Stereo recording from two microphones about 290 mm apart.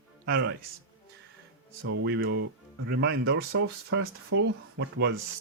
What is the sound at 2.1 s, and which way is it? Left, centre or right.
Speech, right.